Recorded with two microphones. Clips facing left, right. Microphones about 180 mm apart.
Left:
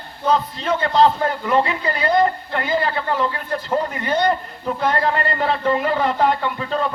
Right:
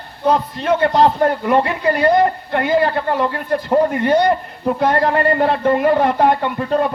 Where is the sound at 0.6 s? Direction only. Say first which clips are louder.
Right 3 dB; 55° right (ahead or behind).